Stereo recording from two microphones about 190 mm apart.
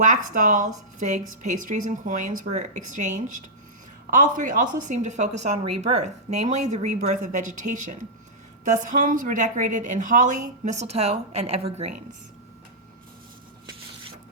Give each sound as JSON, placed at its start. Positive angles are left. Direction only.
{"t": 0.0, "sound": "a woman's voice", "side_deg": -40}